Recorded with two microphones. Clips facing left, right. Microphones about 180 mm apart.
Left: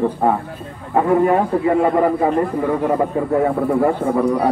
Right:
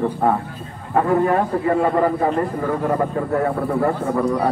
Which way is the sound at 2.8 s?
15° left (ahead or behind).